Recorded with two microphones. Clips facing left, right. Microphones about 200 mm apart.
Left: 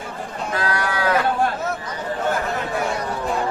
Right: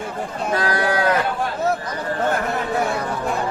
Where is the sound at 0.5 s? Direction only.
35° right (ahead or behind).